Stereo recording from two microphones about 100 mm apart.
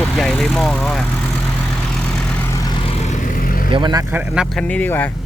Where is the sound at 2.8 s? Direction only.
75° left (ahead or behind).